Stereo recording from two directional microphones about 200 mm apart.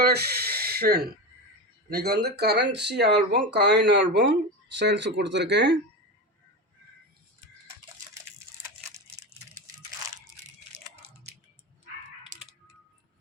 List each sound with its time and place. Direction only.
0.0 s snort: 50° right (ahead or behind)
1.9 s speech: 50° right (ahead or behind)